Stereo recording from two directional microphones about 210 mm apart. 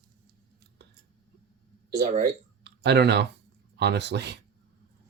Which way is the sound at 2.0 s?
35° right (ahead or behind).